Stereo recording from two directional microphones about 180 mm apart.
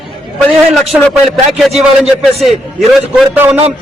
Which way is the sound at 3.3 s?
10° right (ahead or behind).